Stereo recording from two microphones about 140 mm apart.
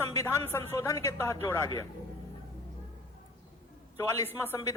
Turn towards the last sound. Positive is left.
turn(degrees=15)  # may be behind; listen again after turning